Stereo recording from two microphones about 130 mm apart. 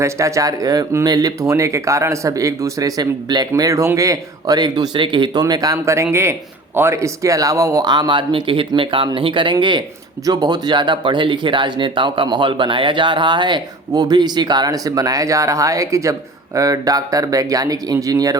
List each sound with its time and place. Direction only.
0.0 s speech: 25° right (ahead or behind)